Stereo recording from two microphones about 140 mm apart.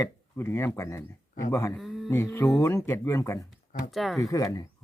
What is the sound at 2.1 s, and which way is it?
A man's voice, 20° left (ahead or behind).